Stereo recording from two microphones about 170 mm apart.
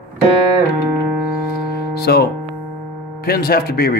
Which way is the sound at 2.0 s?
70° left (ahead or behind).